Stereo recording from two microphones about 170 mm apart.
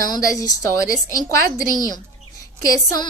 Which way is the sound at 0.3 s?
20° left (ahead or behind).